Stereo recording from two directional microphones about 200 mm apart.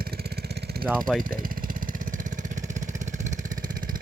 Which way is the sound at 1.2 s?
45° right (ahead or behind).